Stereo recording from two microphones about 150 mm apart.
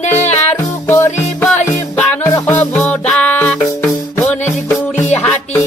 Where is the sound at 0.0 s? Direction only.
50° left (ahead or behind).